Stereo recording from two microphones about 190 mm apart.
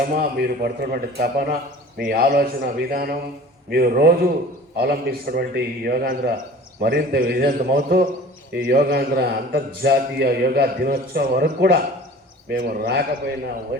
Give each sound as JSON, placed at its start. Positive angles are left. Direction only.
{"t": 0.2, "sound": "a man's voice", "side_deg": -55}